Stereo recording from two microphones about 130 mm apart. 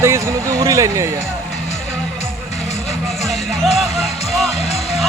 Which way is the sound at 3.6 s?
Centre (ahead or behind).